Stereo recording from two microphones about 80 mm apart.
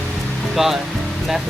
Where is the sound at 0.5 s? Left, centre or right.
Centre.